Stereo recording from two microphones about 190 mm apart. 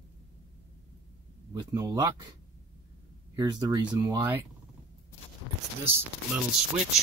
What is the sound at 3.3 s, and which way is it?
Speech, 20° right (ahead or behind).